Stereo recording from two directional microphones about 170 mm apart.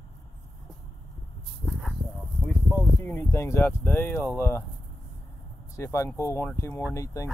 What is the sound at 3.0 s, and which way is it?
Speech, 15° left (ahead or behind).